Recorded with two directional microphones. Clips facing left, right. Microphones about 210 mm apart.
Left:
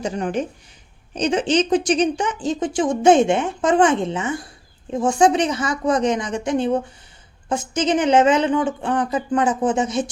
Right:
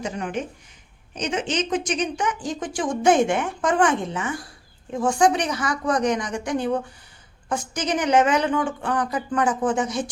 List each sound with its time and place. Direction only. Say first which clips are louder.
0.0 s a woman's voice: left 5 dB; 35° left (ahead or behind)